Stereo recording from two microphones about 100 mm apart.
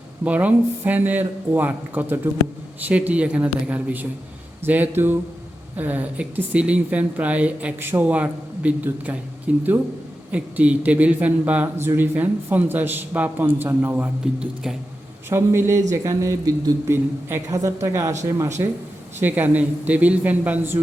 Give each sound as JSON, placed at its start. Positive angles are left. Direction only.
{"t": 0.3, "sound": "speech", "side_deg": -15}
{"t": 19.2, "sound": "speech", "side_deg": -15}